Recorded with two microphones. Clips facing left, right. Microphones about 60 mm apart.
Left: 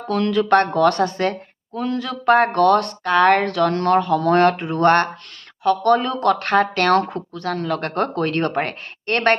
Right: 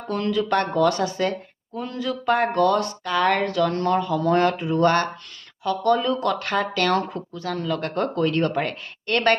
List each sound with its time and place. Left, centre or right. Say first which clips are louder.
0.1 s a woman's voice: left 6 dB; left